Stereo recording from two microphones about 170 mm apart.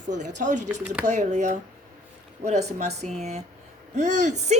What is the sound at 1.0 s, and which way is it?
A woman's voice, 45° right (ahead or behind).